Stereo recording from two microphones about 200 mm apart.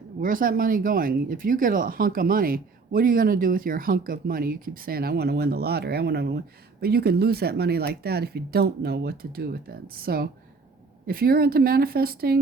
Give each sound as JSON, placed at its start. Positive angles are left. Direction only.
{"t": 0.2, "sound": "speech", "side_deg": -45}